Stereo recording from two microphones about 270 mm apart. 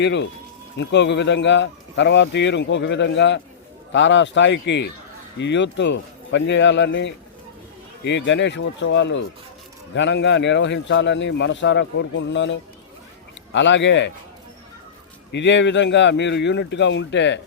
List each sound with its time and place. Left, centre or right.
0.0 s speech: left
15.3 s speech: left